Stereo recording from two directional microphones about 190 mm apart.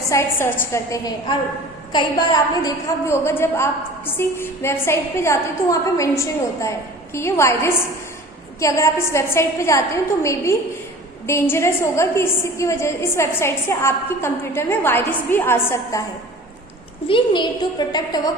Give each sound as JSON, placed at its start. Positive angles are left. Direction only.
{"t": 0.1, "sound": "a woman's voice", "side_deg": 15}
{"t": 17.1, "sound": "a woman's voice", "side_deg": 25}